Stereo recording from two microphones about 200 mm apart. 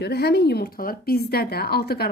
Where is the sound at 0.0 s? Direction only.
55° left (ahead or behind).